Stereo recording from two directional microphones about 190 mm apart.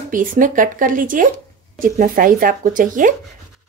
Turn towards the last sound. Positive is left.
turn(degrees=-45)  # may be behind; listen again after turning